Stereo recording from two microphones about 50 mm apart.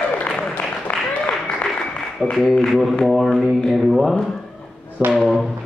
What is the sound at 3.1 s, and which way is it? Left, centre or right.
A man's voice, centre.